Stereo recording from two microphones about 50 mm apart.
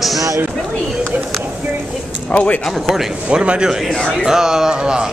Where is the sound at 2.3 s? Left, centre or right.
Left.